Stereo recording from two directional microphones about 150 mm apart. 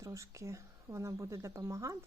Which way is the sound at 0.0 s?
20° right (ahead or behind).